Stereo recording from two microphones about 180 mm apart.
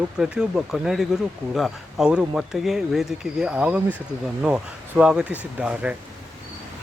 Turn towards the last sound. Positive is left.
turn(degrees=-5)  # may be behind; listen again after turning